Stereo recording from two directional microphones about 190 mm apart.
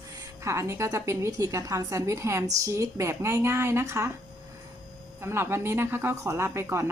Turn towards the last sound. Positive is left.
turn(degrees=-15)  # may be behind; listen again after turning